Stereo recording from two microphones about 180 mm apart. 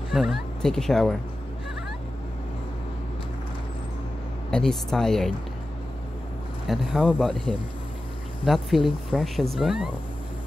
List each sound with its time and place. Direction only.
0.1 s speech: centre (ahead or behind)
4.5 s speech: 5° left (ahead or behind)
6.7 s speech: centre (ahead or behind)